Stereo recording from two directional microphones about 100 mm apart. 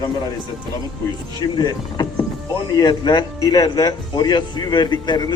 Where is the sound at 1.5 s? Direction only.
40° left (ahead or behind).